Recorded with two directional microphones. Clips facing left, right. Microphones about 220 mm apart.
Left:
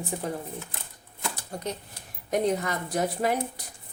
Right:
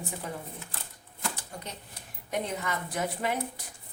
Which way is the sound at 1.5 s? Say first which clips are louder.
Left 8 dB; 35° left (ahead or behind).